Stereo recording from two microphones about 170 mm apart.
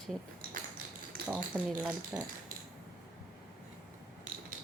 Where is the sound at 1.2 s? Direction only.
65° right (ahead or behind).